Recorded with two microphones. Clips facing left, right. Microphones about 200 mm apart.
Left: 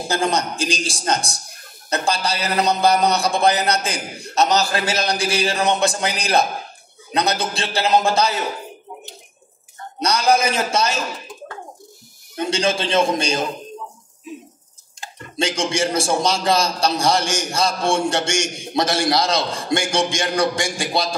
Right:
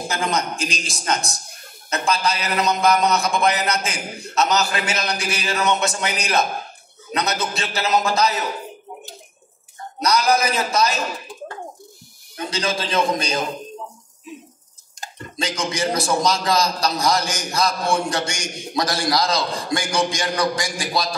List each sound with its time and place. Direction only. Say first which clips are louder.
0.1 s a man's voice: left 4 dB; 35° left (ahead or behind)
10.0 s a man's voice: left 1 dB; 30° left (ahead or behind)
12.4 s a man's voice: left 4 dB; 25° left (ahead or behind)
15.3 s a man's voice: left 4 dB; 30° left (ahead or behind)